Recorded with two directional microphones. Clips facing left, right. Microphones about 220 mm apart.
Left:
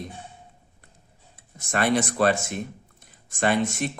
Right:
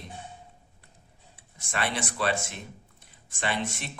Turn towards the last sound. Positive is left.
turn(degrees=45)  # may be behind; listen again after turning